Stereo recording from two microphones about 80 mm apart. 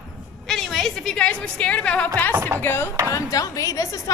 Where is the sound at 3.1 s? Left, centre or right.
Left.